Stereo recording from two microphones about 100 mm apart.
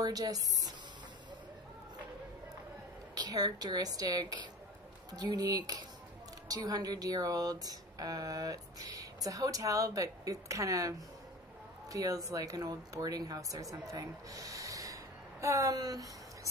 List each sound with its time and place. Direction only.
0.0 s speech: 40° right (ahead or behind)
3.2 s speech: 40° right (ahead or behind)